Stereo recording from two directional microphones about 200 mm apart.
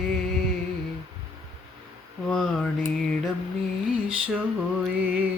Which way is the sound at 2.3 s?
5° left (ahead or behind).